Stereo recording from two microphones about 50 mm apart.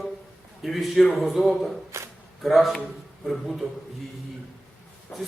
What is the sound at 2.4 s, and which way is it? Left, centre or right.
A man's voice, centre.